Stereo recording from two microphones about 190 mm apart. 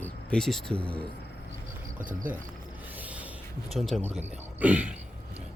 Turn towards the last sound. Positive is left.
turn(degrees=-5)  # may be behind; listen again after turning